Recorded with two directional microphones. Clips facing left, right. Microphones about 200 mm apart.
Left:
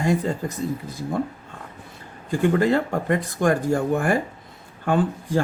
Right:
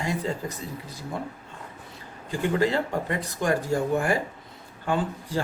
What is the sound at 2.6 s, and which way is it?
Speech, 50° left (ahead or behind).